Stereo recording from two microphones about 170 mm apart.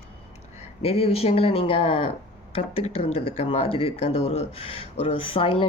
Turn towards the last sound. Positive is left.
turn(degrees=30)  # may be behind; listen again after turning